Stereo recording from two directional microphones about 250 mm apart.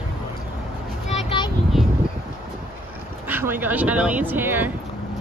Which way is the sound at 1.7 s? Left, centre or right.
Centre.